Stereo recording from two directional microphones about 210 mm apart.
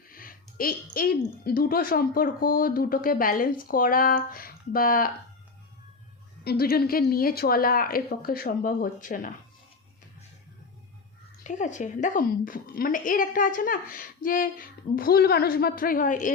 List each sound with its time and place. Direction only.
0.1 s speech: 45° left (ahead or behind)
6.4 s speech: 45° left (ahead or behind)
11.4 s a woman's voice: 35° left (ahead or behind)